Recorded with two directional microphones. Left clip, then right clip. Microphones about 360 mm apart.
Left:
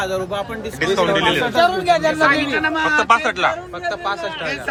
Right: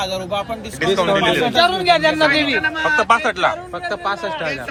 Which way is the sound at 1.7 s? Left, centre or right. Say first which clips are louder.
Right 1 dB; right.